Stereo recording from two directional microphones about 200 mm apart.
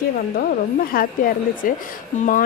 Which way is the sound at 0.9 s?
45° left (ahead or behind).